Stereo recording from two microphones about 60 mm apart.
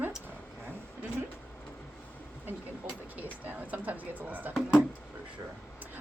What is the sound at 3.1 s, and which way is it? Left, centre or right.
Speech, right.